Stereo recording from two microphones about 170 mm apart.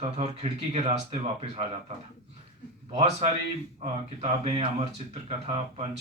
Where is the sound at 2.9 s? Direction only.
35° right (ahead or behind).